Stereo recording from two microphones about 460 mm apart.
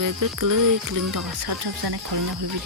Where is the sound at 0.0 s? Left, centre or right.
Right.